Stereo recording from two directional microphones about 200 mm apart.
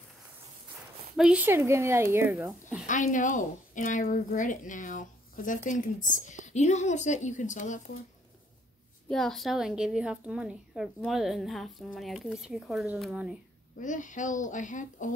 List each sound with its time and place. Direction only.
1.1 s a woman's voice: 5° right (ahead or behind)
2.9 s a woman's voice: 40° left (ahead or behind)
9.1 s a woman's voice: centre (ahead or behind)
13.7 s a woman's voice: 40° left (ahead or behind)